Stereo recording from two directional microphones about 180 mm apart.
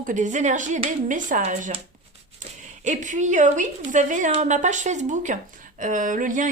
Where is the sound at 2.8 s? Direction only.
40° right (ahead or behind).